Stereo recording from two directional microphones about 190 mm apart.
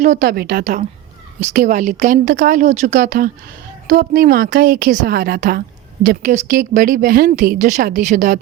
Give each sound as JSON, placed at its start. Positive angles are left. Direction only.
{"t": 0.0, "sound": "a woman's voice", "side_deg": -45}